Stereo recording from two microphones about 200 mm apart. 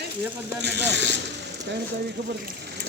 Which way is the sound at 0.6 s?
60° right (ahead or behind).